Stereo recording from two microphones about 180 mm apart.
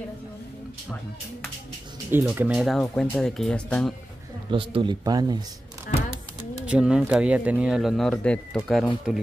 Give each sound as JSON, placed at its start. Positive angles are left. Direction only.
{"t": 2.0, "sound": "speech", "side_deg": -10}
{"t": 4.5, "sound": "speech", "side_deg": -30}
{"t": 6.6, "sound": "speech", "side_deg": -5}